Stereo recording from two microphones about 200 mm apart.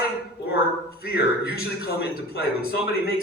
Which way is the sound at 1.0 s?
50° left (ahead or behind).